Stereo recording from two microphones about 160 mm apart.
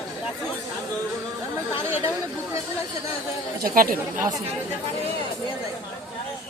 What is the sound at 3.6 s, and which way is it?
Speech, 65° right (ahead or behind).